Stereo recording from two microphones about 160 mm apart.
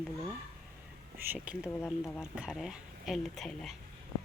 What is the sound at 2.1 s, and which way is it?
Speech, 5° right (ahead or behind).